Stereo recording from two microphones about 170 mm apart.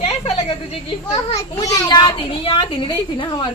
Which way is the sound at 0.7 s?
35° left (ahead or behind).